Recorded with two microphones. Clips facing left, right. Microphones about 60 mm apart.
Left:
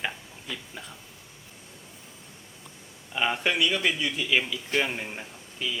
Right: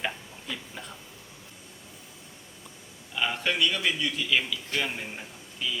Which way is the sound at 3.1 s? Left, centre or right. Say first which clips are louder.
Left 2 dB; left.